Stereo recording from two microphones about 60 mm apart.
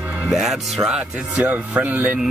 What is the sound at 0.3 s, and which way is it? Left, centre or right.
Speech, centre.